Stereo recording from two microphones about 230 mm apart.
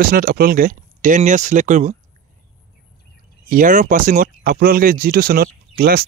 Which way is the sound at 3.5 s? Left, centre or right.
Right.